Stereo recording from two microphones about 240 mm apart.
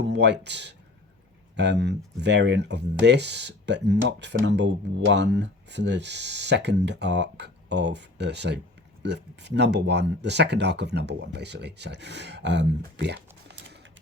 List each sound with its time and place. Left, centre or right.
0.0 s speech: right